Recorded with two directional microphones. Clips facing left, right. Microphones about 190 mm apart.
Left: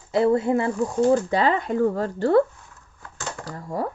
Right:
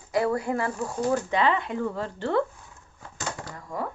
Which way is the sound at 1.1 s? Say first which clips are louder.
Left 4 dB; 35° left (ahead or behind).